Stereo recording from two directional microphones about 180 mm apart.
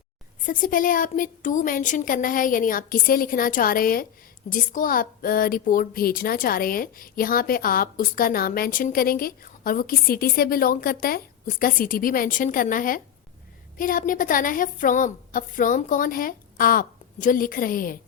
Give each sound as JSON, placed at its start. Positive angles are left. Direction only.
{"t": 0.4, "sound": "a woman's voice", "side_deg": 50}